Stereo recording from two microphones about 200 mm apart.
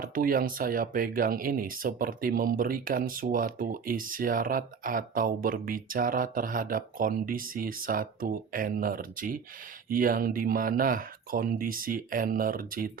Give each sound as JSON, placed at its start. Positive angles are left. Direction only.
{"t": 0.0, "sound": "speech", "side_deg": -45}